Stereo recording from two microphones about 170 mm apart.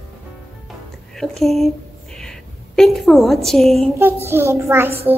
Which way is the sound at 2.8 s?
Centre (ahead or behind).